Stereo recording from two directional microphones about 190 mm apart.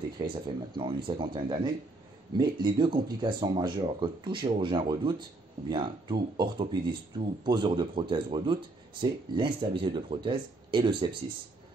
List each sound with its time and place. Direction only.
0.2 s speech: 20° right (ahead or behind)